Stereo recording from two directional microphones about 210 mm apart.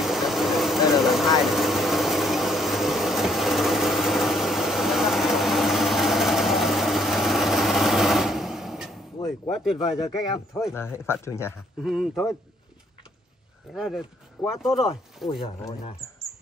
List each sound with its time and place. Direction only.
0.0 s vehicle: centre (ahead or behind)
9.5 s speech: centre (ahead or behind)
10.7 s speech: 10° left (ahead or behind)
11.8 s speech: centre (ahead or behind)
13.7 s speech: centre (ahead or behind)
16.0 s mouse: 15° left (ahead or behind)